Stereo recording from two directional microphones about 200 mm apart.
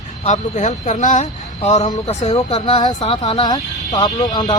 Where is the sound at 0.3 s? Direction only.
40° left (ahead or behind).